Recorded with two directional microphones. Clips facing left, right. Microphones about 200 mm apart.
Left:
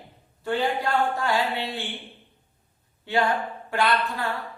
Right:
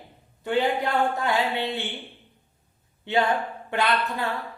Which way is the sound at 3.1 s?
20° right (ahead or behind).